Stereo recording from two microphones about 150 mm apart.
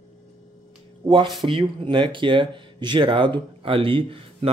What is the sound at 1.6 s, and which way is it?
Speech, 30° right (ahead or behind).